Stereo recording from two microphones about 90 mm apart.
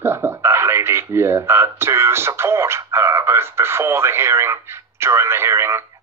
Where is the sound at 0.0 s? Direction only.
30° right (ahead or behind).